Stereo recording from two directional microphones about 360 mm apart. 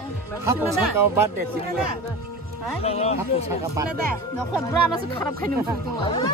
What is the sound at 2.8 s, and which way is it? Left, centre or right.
Music, centre.